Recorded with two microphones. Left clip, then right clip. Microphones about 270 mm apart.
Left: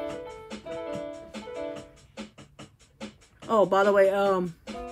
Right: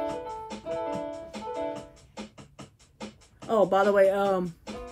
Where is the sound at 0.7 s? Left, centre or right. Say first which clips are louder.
Right 3 dB; right.